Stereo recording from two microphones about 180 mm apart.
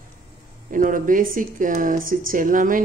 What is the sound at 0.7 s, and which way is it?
Speech, 50° right (ahead or behind).